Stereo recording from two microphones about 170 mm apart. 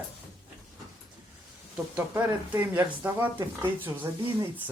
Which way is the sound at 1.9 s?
10° right (ahead or behind).